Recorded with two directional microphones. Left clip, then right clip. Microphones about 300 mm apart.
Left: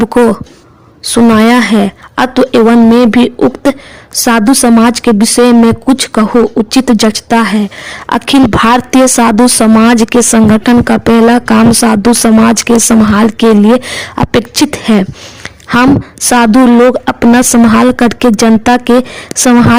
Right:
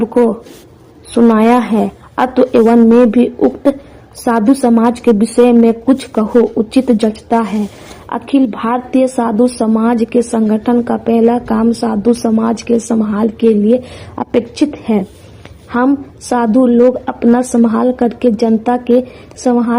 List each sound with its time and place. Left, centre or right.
1.1 s a woman's voice: left
16.3 s a woman's voice: left